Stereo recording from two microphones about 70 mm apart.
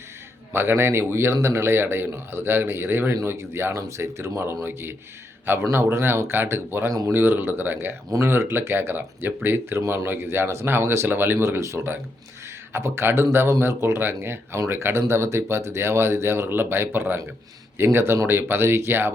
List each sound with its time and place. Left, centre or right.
0.5 s a man's voice: right